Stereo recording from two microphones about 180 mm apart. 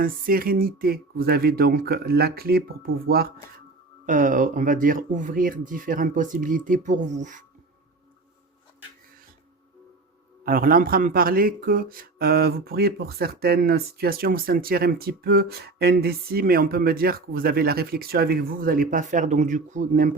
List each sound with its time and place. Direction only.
0.0 s speech: 55° right (ahead or behind)
4.0 s speech: 45° right (ahead or behind)
10.4 s speech: 55° right (ahead or behind)